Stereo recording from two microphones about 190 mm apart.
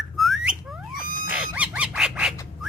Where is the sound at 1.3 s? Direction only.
5° right (ahead or behind).